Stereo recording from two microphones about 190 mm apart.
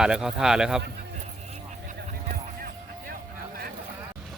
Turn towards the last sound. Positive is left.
turn(degrees=-50)  # may be behind; listen again after turning